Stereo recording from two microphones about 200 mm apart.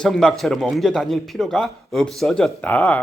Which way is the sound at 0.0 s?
Centre (ahead or behind).